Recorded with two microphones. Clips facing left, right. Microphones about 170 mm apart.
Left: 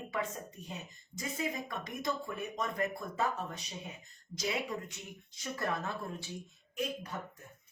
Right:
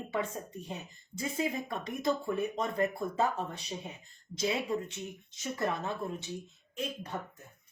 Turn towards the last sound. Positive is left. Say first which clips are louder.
# even
turn(degrees=-30)  # may be behind; listen again after turning